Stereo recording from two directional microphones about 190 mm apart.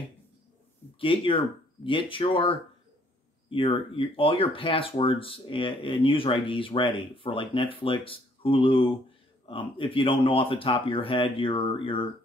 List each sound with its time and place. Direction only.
0.9 s speech: 30° left (ahead or behind)